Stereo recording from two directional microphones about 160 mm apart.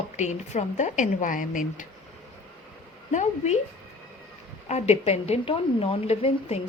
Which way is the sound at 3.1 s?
45° left (ahead or behind).